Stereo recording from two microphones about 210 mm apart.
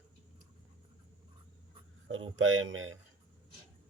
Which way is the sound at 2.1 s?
70° right (ahead or behind).